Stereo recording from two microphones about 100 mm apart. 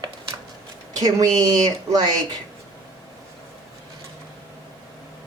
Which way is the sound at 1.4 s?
40° right (ahead or behind).